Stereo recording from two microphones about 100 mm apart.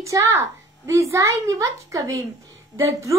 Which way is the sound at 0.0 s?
30° right (ahead or behind).